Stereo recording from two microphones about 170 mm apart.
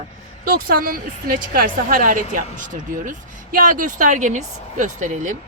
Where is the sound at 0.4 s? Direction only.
55° right (ahead or behind).